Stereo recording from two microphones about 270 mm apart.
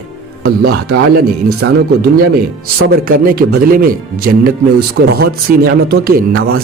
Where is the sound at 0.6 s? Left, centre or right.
Right.